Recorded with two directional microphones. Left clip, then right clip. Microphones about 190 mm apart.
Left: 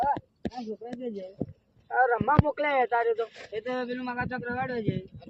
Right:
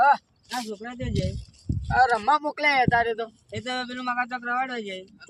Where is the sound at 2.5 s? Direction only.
5° right (ahead or behind).